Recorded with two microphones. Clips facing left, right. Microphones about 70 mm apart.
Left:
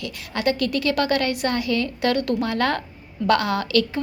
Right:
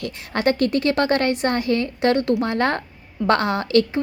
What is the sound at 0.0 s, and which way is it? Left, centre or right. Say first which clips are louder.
A woman's voice: right 3 dB; right.